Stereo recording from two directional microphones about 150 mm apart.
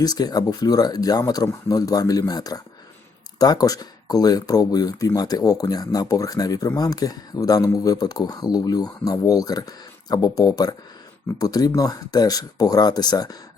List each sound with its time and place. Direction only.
0.0 s speech: 25° left (ahead or behind)